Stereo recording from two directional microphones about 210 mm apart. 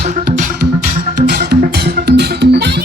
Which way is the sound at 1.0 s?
45° right (ahead or behind).